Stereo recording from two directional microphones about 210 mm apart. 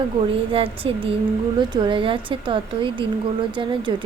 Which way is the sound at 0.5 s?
25° right (ahead or behind).